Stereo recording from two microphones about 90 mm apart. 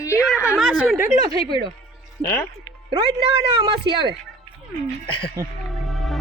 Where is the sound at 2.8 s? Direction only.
75° right (ahead or behind).